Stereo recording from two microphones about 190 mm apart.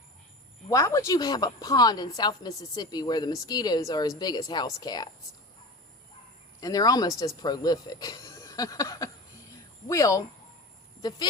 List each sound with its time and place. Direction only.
0.7 s a woman's voice: 15° left (ahead or behind)
6.6 s a woman's voice: 20° left (ahead or behind)